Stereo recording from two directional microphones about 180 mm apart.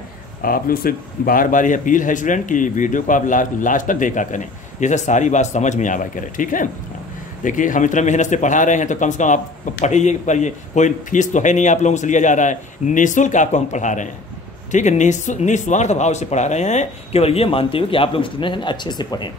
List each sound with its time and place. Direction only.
0.4 s speech: 55° left (ahead or behind); by 19.3 s 25° left (ahead or behind)